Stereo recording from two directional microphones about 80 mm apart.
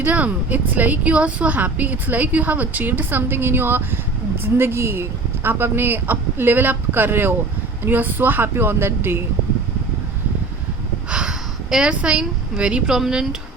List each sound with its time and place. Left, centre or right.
0.0 s a woman's voice: centre
11.1 s a woman's voice: centre